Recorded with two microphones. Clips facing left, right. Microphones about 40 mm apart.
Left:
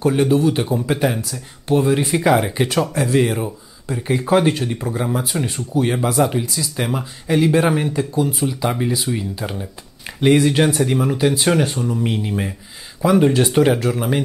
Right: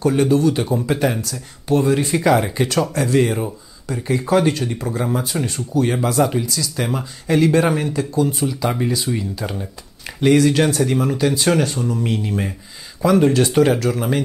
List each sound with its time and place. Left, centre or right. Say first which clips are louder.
0.0 s speech: even; centre
1.0 s speech: even; centre
4.1 s speech: left 1 dB; left
8.6 s speech: even; centre